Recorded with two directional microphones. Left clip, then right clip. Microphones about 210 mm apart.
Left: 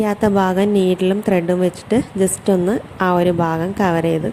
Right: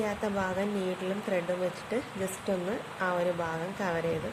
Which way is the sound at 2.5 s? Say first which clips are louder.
Left 14 dB; 40° left (ahead or behind).